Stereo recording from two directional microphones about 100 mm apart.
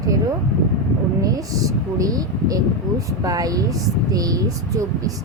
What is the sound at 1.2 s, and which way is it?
A woman's voice, 35° right (ahead or behind).